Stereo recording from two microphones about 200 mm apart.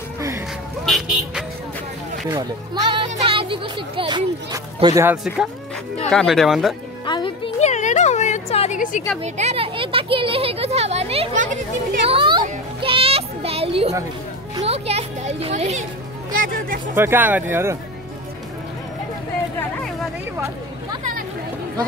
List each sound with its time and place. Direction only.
0.8 s vehicle: centre (ahead or behind)
2.3 s speech: 25° right (ahead or behind)
6.0 s speech: centre (ahead or behind)
7.1 s a sound: 25° left (ahead or behind); by 9.0 s 40° left (ahead or behind)
9.2 s speech: 35° right (ahead or behind)
12.1 s music: 25° right (ahead or behind)
14.7 s speech: 30° right (ahead or behind)
16.3 s speech: 45° right (ahead or behind)
16.9 s speech: 10° right (ahead or behind)